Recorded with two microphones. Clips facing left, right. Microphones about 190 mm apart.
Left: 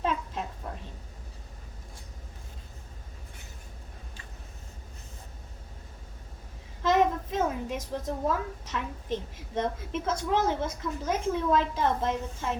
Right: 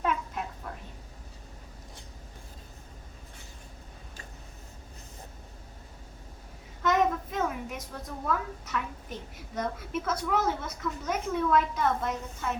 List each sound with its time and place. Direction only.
6.8 s a woman's voice: 25° left (ahead or behind)